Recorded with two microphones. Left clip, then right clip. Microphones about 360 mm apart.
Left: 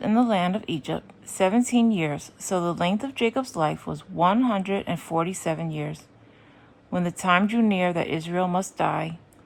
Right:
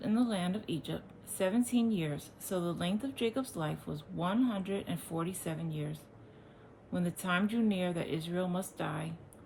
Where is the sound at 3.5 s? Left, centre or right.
Centre.